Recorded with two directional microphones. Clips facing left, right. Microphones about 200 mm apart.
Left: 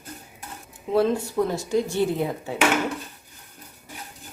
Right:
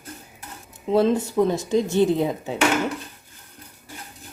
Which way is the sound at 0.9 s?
20° right (ahead or behind).